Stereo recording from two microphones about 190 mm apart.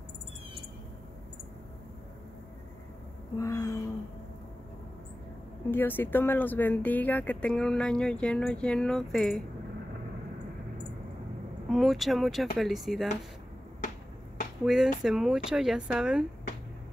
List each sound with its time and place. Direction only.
3.3 s a sound: 15° left (ahead or behind)
5.7 s speech: 10° left (ahead or behind)
11.7 s speech: centre (ahead or behind)
14.6 s speech: 5° right (ahead or behind)